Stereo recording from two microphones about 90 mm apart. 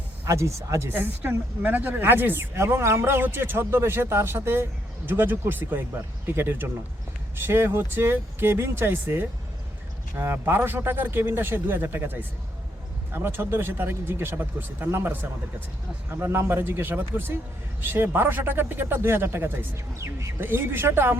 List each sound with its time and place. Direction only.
0.3 s speech: 35° right (ahead or behind)